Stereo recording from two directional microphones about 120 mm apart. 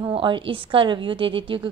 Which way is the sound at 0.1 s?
45° right (ahead or behind).